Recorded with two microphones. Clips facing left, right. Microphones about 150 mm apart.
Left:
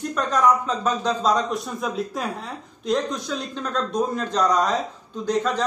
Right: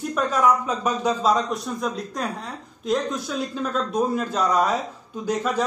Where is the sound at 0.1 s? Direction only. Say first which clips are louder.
Even; 5° right (ahead or behind).